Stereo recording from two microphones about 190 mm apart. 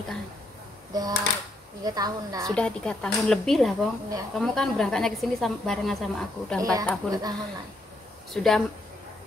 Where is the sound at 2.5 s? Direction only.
5° left (ahead or behind).